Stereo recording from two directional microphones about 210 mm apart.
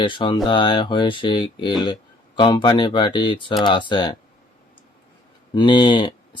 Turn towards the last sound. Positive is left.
turn(degrees=20)  # may be behind; listen again after turning